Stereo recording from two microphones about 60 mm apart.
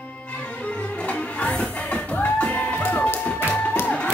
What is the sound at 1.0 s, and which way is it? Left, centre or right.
Music, left.